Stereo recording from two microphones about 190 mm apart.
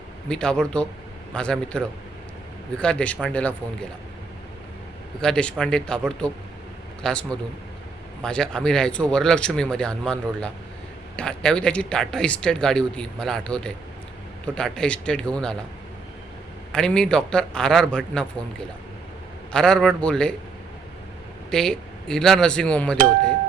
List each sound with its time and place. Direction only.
0.3 s speech: 5° left (ahead or behind)
5.2 s speech: 5° left (ahead or behind)
16.7 s speech: 5° left (ahead or behind)
19.5 s speech: 5° left (ahead or behind)
21.5 s speech: 5° left (ahead or behind)